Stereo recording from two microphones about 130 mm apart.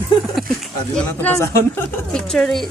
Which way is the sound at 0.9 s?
10° left (ahead or behind).